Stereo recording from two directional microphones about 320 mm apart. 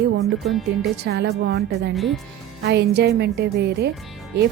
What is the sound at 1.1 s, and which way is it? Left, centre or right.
Speech, right.